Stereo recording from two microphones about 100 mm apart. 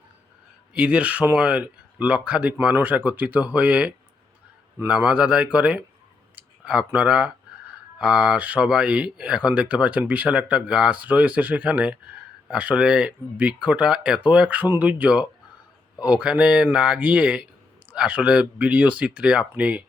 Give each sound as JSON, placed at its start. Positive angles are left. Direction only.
{"t": 0.7, "sound": "speech", "side_deg": -10}